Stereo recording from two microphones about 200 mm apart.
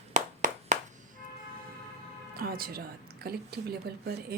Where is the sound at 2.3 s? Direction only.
50° right (ahead or behind).